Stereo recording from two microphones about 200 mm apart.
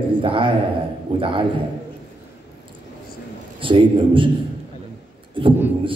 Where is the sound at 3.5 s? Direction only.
25° right (ahead or behind).